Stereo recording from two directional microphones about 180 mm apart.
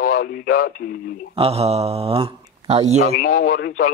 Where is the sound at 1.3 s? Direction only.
35° right (ahead or behind).